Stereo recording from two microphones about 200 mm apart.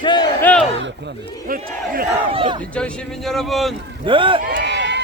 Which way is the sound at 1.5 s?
45° right (ahead or behind).